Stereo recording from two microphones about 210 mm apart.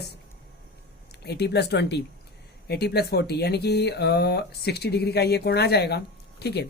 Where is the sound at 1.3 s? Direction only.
50° left (ahead or behind).